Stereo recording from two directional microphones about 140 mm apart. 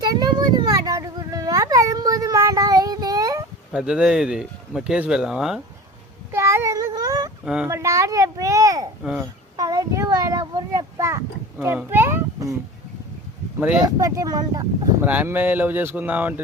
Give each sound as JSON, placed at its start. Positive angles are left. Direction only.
{"t": 0.0, "sound": "a sound", "side_deg": -30}
{"t": 3.7, "sound": "speech", "side_deg": -5}
{"t": 6.3, "sound": "child singing", "side_deg": -20}
{"t": 7.4, "sound": "speech", "side_deg": -5}
{"t": 7.7, "sound": "a child's voice", "side_deg": -20}
{"t": 9.6, "sound": "a sound", "side_deg": -25}
{"t": 11.6, "sound": "speech", "side_deg": -15}
{"t": 13.8, "sound": "a child's voice", "side_deg": -25}
{"t": 15.0, "sound": "speech", "side_deg": -10}